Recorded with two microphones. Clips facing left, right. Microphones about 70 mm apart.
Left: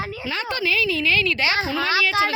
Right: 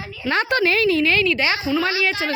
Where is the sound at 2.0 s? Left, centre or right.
Right.